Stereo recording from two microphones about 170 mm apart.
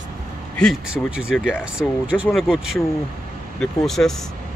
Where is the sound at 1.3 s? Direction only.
10° left (ahead or behind).